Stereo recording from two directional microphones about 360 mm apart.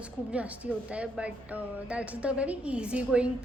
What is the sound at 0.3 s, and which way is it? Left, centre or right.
Speech, centre.